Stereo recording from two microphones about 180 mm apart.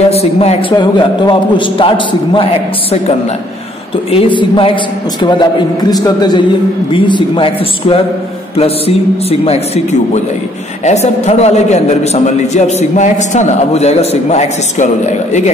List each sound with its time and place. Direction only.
0.1 s a man's voice: 35° left (ahead or behind)
4.1 s a man's voice: 25° left (ahead or behind)